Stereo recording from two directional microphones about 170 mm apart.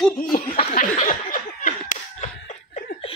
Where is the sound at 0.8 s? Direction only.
50° left (ahead or behind).